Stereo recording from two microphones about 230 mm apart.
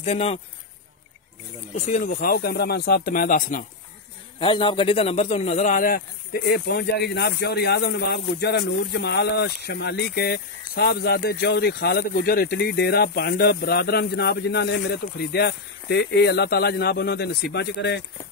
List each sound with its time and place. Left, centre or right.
0.0 s speech: left
1.8 s speech: left
4.4 s a man's voice: left